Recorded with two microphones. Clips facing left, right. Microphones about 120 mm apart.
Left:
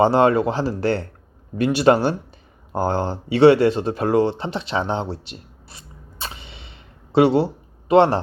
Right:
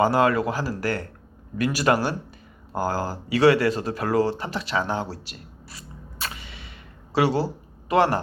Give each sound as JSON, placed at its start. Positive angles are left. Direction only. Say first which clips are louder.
{"t": 0.0, "sound": "speech", "louder": "left 4 dB", "side_deg": 25}